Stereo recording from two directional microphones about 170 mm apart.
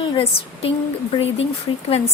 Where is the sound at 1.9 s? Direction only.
35° left (ahead or behind).